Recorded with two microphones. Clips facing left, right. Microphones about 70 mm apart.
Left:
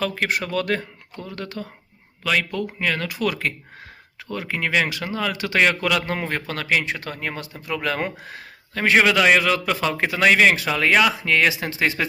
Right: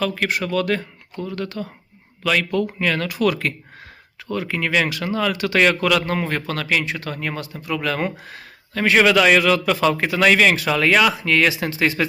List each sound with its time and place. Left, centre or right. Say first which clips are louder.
0.0 s speech: right 2 dB; left
2.2 s a man's voice: right 3 dB; centre